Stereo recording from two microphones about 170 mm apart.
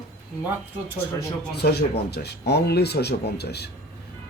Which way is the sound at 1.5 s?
75° left (ahead or behind).